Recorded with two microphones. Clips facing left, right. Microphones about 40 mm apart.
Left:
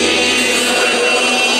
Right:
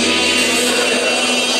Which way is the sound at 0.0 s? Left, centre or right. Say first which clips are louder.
Left 2 dB; centre.